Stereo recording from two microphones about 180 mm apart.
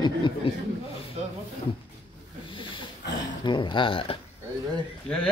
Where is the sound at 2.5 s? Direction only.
25° left (ahead or behind).